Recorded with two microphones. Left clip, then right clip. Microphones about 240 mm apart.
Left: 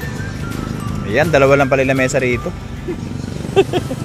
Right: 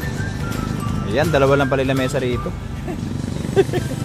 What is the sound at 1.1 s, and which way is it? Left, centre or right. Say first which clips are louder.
Speech: left 4 dB; centre.